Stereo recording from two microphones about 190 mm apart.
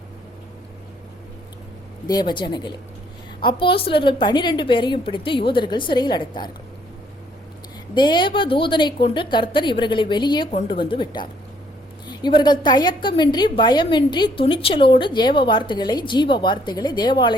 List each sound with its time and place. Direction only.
2.0 s a woman's voice: 20° left (ahead or behind)
7.9 s a woman's voice: 25° left (ahead or behind)